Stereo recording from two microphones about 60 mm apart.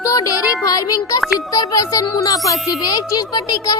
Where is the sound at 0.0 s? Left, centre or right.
Left.